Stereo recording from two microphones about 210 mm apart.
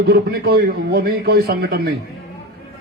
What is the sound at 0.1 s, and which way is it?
A man's voice, 45° right (ahead or behind).